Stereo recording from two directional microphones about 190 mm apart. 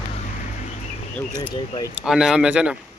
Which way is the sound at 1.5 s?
20° left (ahead or behind).